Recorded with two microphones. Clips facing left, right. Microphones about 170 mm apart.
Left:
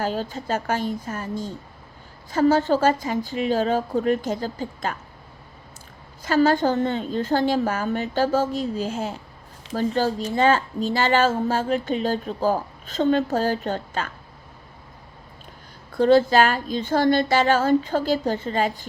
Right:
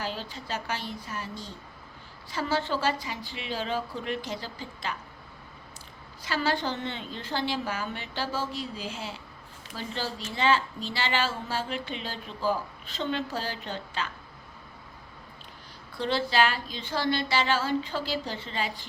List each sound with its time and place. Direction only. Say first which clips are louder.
0.0 s a woman's voice: left 9 dB; 45° left (ahead or behind)
6.2 s a woman's voice: left 10 dB; 45° left (ahead or behind)
16.0 s a woman's voice: left 10 dB; 45° left (ahead or behind)